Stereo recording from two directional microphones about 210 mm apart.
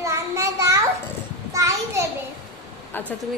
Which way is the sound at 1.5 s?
15° right (ahead or behind).